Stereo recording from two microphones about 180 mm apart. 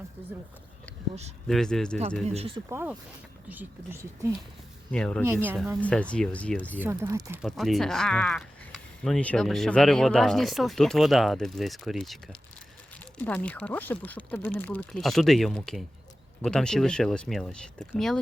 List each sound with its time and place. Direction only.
1.5 s speech: centre (ahead or behind)
2.2 s speech: 35° right (ahead or behind)
2.6 s speech: 15° right (ahead or behind)
4.9 s speech: 5° left (ahead or behind)
5.2 s speech: 10° right (ahead or behind)
5.8 s speech: 5° left (ahead or behind)
6.8 s speech: 15° right (ahead or behind)
7.4 s speech: centre (ahead or behind)